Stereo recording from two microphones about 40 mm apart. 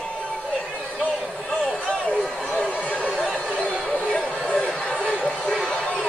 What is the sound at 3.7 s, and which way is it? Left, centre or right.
Chatter, centre.